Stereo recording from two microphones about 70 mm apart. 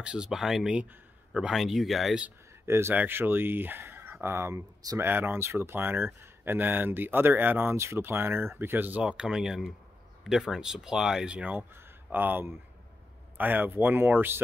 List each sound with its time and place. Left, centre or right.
0.0 s speech: centre
2.6 s speech: right
7.7 s speech: right
9.0 s speech: centre
11.7 s speech: right